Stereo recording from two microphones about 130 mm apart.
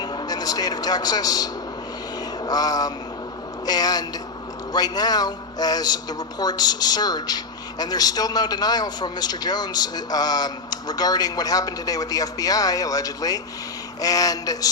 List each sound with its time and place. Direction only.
0.0 s a man's voice: 35° left (ahead or behind)
2.4 s a sound: 30° left (ahead or behind)
3.7 s a man's voice: 30° left (ahead or behind)